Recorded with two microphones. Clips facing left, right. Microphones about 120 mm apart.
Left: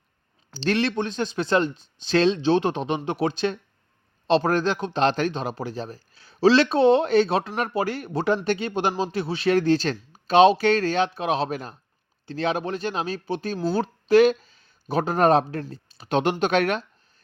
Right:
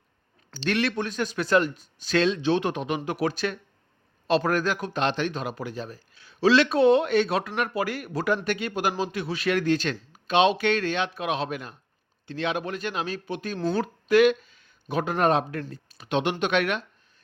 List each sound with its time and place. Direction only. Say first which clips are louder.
0.5 s speech: left 3 dB; 30° left (ahead or behind)